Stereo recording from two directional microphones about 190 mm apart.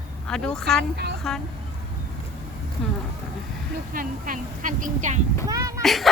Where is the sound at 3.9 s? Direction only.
45° right (ahead or behind).